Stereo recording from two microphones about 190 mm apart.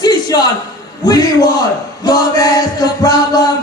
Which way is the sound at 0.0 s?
20° left (ahead or behind).